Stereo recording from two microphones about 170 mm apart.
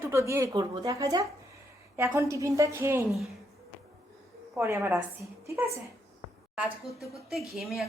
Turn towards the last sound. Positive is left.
turn(degrees=0)  # may be behind; listen again after turning